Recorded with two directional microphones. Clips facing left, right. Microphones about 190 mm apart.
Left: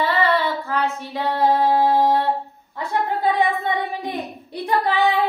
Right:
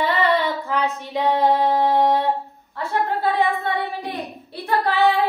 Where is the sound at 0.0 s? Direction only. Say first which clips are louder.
Even; 20° right (ahead or behind).